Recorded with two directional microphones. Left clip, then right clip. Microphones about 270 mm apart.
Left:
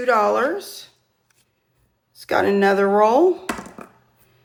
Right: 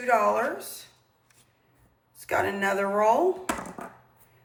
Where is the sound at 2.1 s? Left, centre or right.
Centre.